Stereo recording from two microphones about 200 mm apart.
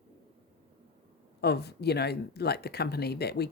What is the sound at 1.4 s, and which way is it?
Speech, 55° left (ahead or behind).